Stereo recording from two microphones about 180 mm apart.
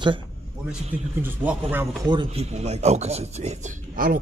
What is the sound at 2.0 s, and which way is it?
Speech, 25° right (ahead or behind).